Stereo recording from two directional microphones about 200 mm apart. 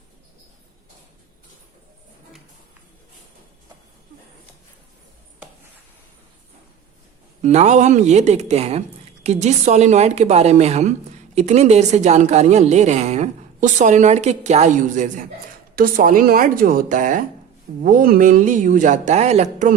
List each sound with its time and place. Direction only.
7.4 s a woman's voice: 35° right (ahead or behind)